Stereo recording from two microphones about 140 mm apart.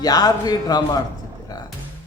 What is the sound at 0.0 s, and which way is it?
Speech, 30° left (ahead or behind).